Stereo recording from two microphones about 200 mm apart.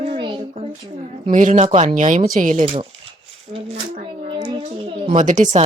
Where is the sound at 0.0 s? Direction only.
25° right (ahead or behind).